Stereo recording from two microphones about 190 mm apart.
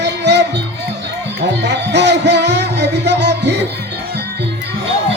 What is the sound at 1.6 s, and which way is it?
Music, 65° right (ahead or behind).